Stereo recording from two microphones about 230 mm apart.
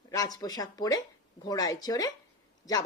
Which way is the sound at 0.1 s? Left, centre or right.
Centre.